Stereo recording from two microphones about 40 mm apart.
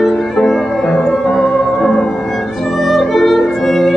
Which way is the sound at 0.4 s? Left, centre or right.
Centre.